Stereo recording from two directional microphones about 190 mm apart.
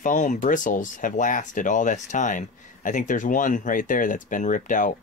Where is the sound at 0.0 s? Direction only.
40° left (ahead or behind).